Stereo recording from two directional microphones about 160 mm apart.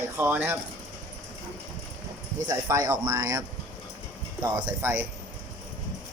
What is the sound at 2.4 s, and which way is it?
Speech, 20° right (ahead or behind).